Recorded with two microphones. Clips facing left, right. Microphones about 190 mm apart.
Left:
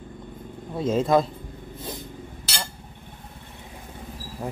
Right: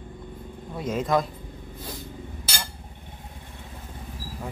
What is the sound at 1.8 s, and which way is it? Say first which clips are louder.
Cat: left 3 dB; 20° left (ahead or behind).